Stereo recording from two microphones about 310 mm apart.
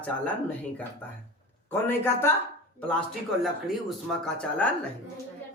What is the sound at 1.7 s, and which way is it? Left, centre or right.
A man's voice, centre.